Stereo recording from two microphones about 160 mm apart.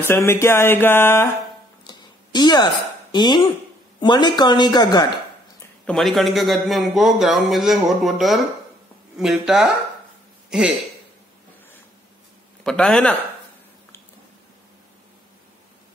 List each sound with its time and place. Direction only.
0.1 s speech: 15° left (ahead or behind)
1.9 s a sound: 25° left (ahead or behind)
3.1 s speech: 25° left (ahead or behind)
5.9 s a man's voice: centre (ahead or behind)
12.6 s speech: 5° left (ahead or behind)